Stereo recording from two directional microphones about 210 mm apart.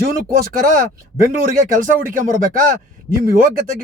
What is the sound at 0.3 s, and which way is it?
Speech, 45° right (ahead or behind).